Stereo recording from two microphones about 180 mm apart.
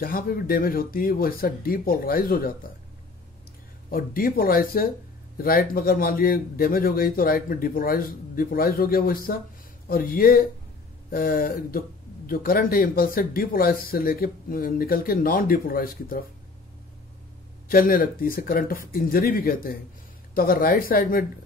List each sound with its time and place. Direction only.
0.0 s speech: 55° left (ahead or behind)
3.9 s speech: 55° left (ahead or behind)
17.6 s speech: 50° left (ahead or behind)